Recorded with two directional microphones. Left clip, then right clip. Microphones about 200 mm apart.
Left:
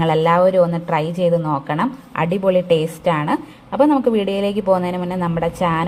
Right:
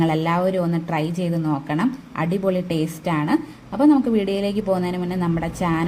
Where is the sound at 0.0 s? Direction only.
20° left (ahead or behind).